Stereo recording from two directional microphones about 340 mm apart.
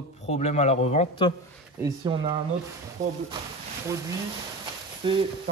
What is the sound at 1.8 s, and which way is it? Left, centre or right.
Speech, centre.